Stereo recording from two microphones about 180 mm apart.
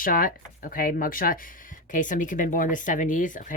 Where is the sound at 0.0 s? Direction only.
50° left (ahead or behind).